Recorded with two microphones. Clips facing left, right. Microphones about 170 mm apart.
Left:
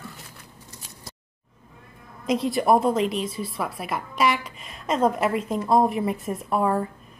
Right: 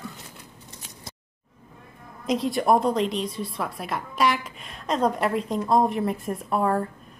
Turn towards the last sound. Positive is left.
turn(degrees=5)  # may be behind; listen again after turning